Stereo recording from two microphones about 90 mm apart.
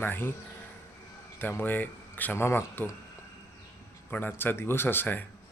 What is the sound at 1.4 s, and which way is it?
A man's voice, 20° left (ahead or behind).